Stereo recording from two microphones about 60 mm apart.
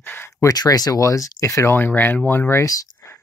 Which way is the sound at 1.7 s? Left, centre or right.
Left.